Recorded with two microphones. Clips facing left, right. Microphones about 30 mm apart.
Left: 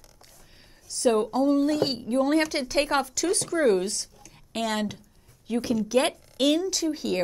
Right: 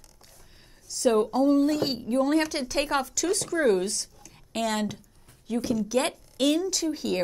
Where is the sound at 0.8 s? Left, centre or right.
Centre.